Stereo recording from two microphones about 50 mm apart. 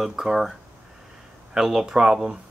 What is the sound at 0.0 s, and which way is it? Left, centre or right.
Speech, centre.